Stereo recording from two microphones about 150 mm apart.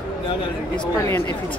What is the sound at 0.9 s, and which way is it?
Speech, 20° left (ahead or behind).